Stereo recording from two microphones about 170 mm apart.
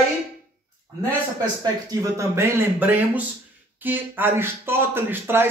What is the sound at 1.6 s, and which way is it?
A man's voice, 20° right (ahead or behind).